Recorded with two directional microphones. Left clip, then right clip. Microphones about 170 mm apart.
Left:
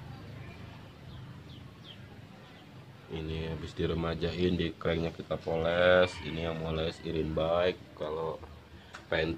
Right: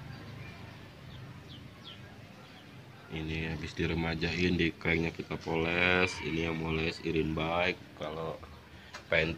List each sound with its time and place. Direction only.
3.1 s speech: 25° left (ahead or behind)